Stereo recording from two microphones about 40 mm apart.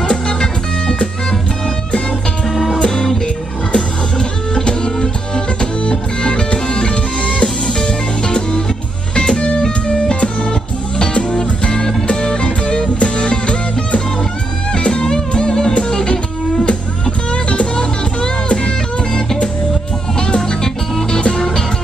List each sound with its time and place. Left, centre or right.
0.1 s music: centre
2.5 s music: centre
2.9 s music: centre
3.7 s music: left
20.3 s music: centre